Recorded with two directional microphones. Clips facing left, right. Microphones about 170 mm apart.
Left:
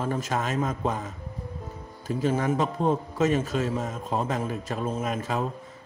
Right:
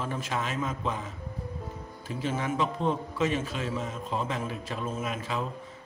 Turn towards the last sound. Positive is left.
turn(degrees=45)  # may be behind; listen again after turning